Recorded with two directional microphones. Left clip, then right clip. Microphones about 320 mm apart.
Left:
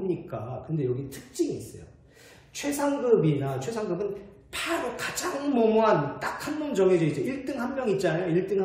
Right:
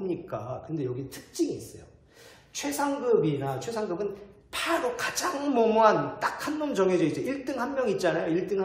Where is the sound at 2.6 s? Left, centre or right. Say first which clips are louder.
Left 2 dB; centre.